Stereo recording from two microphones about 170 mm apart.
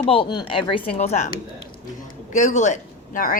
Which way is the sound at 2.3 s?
45° left (ahead or behind).